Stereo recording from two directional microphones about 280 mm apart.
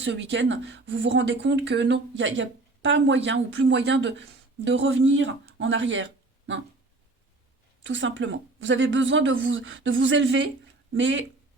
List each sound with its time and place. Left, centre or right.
0.0 s speech: right
7.9 s speech: right